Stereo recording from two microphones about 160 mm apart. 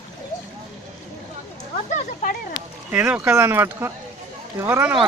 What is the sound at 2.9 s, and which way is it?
Speech, 10° right (ahead or behind).